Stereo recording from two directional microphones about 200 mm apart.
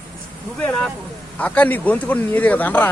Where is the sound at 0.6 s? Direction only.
5° left (ahead or behind).